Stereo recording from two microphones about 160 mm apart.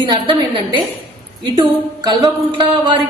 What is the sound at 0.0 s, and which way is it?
Speech, 30° right (ahead or behind).